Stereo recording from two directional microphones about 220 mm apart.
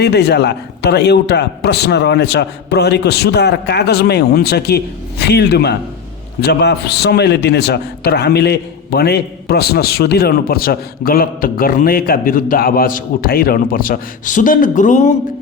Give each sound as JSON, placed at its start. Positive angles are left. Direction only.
{"t": 0.0, "sound": "a man's voice", "side_deg": 50}